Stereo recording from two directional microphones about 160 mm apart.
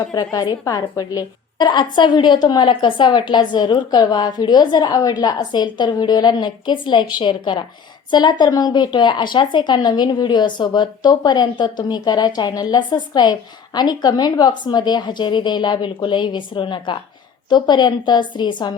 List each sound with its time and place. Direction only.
0.1 s a woman's voice: 25° left (ahead or behind)